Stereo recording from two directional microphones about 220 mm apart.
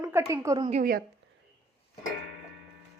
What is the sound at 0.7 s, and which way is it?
Speech, 35° right (ahead or behind).